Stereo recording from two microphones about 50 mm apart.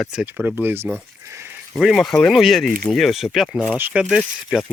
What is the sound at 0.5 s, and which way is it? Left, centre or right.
Speech, right.